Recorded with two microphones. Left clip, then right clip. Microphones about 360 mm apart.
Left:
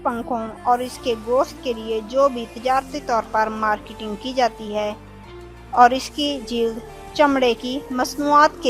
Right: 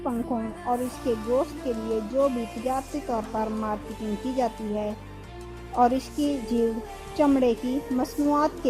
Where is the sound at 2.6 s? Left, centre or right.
Left.